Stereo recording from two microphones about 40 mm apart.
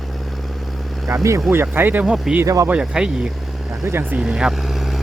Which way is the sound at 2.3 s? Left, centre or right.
Centre.